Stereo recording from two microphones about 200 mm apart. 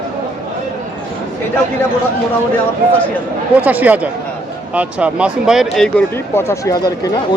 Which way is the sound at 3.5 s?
10° right (ahead or behind).